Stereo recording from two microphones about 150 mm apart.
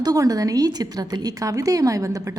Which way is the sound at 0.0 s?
25° right (ahead or behind).